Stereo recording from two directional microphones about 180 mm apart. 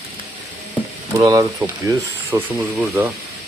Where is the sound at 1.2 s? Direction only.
20° right (ahead or behind).